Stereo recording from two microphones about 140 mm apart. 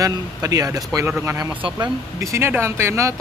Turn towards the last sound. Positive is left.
turn(degrees=-20)  # may be behind; listen again after turning